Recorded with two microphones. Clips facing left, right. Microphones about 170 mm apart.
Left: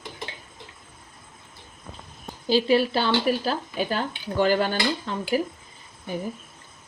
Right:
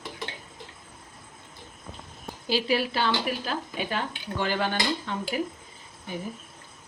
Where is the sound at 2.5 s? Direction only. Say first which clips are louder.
Left 6 dB; 30° left (ahead or behind).